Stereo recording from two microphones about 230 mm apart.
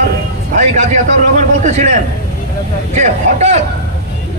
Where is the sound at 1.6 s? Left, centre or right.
Right.